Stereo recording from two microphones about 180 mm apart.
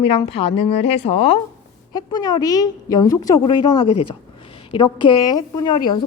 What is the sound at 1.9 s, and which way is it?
A woman's voice, 25° left (ahead or behind).